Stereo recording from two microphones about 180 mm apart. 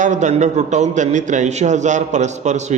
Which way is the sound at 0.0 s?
40° right (ahead or behind).